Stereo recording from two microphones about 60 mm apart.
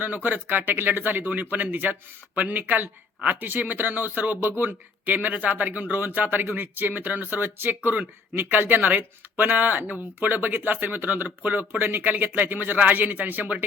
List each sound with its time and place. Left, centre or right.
0.0 s speech: right